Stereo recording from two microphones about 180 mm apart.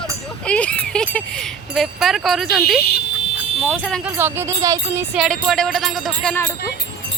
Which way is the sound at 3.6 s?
5° left (ahead or behind).